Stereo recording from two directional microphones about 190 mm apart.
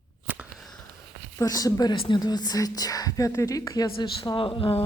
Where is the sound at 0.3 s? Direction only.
5° right (ahead or behind).